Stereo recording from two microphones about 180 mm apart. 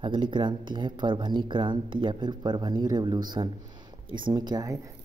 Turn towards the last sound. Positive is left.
turn(degrees=-20)  # may be behind; listen again after turning